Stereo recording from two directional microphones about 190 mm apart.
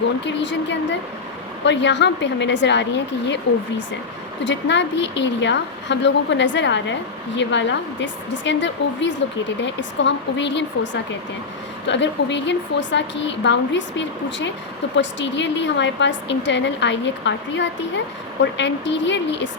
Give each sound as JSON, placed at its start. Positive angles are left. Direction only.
{"t": 0.3, "sound": "a woman's voice", "side_deg": 70}
{"t": 4.4, "sound": "a woman's voice", "side_deg": 70}
{"t": 11.9, "sound": "a woman's voice", "side_deg": 70}